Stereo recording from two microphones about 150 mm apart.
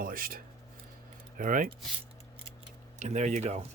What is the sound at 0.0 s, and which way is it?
Speech, 75° right (ahead or behind).